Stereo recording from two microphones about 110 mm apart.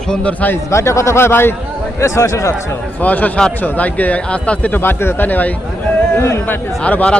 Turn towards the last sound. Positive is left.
turn(degrees=10)  # may be behind; listen again after turning